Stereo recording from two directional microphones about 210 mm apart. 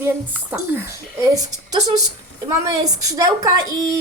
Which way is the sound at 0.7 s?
10° right (ahead or behind).